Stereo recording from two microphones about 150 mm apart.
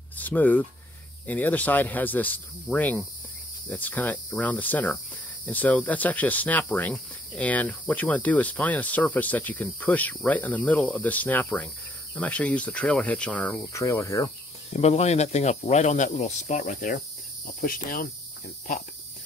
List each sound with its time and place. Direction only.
0.2 s speech: 10° left (ahead or behind)
13.7 s speech: 20° left (ahead or behind)
14.7 s speech: 45° left (ahead or behind)
17.6 s cricket: 70° left (ahead or behind)